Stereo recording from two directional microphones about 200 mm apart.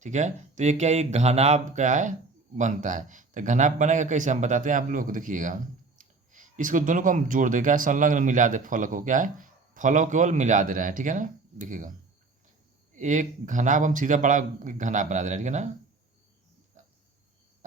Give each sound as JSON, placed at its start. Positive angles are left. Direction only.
{"t": 0.0, "sound": "speech", "side_deg": -35}
{"t": 16.8, "sound": "cricket", "side_deg": -35}